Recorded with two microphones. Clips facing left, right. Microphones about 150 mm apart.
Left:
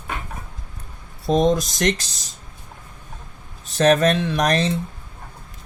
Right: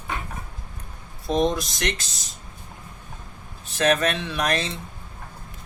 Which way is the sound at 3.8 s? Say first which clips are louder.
Left 5 dB; 35° left (ahead or behind).